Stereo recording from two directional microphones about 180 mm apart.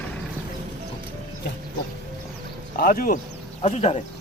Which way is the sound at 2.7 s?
55° left (ahead or behind).